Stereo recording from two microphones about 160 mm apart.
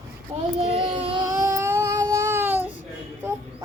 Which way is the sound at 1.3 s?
20° right (ahead or behind).